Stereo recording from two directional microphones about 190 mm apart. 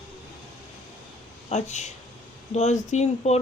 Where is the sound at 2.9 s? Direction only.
35° left (ahead or behind).